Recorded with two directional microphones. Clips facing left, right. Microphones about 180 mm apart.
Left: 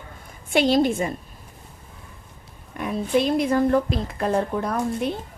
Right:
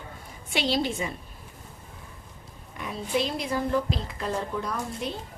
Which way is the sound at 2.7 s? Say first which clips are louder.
Left 6 dB; 55° left (ahead or behind).